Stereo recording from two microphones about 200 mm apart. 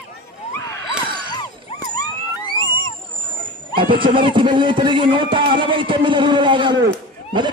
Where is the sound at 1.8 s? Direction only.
20° left (ahead or behind).